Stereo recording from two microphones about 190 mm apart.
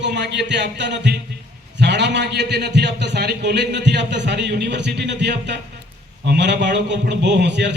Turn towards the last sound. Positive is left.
turn(degrees=-65)  # may be behind; listen again after turning